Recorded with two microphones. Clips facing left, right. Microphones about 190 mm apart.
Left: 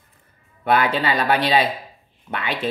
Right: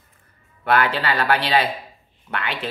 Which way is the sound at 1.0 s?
20° left (ahead or behind).